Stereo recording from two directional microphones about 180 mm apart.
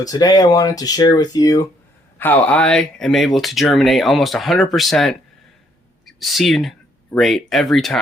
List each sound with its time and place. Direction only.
0.0 s speech: 20° left (ahead or behind); by 7.9 s centre (ahead or behind)